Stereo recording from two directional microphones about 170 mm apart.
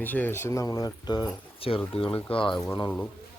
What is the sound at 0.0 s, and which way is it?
Speech, 10° left (ahead or behind).